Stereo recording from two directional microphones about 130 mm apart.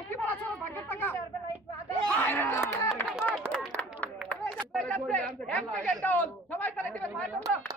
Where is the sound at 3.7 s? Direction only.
10° left (ahead or behind).